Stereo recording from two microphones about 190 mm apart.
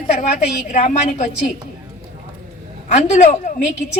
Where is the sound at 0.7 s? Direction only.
40° left (ahead or behind).